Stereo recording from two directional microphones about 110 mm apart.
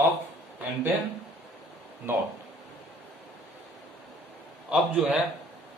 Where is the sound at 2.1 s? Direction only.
20° right (ahead or behind).